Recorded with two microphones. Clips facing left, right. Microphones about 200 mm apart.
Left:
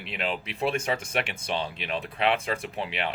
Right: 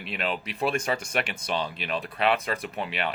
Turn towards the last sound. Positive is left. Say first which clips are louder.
# right 1 dB
turn(degrees=25)  # may be behind; listen again after turning